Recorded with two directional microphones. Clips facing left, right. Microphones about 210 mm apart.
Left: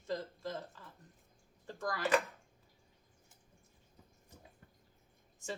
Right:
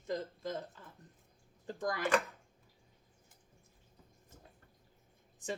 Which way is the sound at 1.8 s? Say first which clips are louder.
Right 1 dB; 20° right (ahead or behind).